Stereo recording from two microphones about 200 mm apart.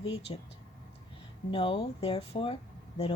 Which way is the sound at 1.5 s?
30° left (ahead or behind).